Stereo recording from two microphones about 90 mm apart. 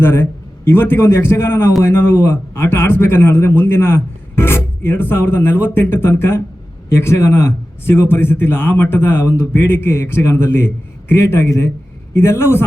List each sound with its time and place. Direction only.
0.0 s speech: 25° left (ahead or behind)